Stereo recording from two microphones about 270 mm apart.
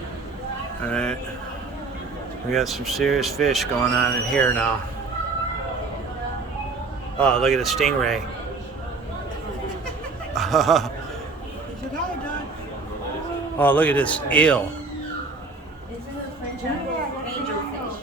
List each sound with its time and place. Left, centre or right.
0.9 s speech: centre
2.5 s speech: centre
7.2 s speech: centre
10.3 s speech: centre
13.6 s speech: centre